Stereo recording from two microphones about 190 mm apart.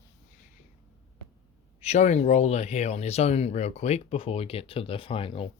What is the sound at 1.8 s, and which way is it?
Speech, 35° left (ahead or behind).